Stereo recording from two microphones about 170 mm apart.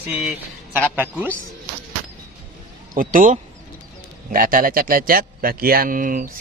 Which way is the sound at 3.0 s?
50° right (ahead or behind).